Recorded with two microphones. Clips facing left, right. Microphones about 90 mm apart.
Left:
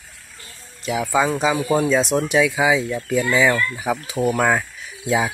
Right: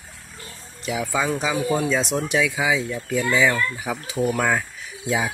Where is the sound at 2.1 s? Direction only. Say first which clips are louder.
Left 4 dB; 50° left (ahead or behind).